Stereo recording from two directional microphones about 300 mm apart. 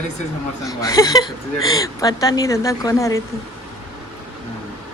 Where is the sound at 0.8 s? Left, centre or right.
Centre.